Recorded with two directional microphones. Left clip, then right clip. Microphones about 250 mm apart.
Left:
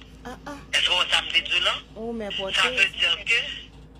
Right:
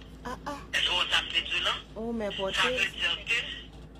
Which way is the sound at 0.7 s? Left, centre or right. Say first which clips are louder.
Left 5 dB; left.